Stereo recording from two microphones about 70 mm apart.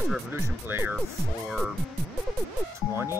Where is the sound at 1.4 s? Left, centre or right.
Centre.